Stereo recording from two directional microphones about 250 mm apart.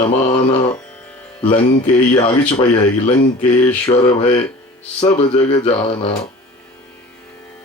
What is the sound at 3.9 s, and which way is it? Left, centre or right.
Speech, left.